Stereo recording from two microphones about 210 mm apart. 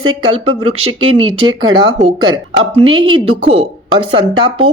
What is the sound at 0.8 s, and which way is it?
Speech, 25° right (ahead or behind).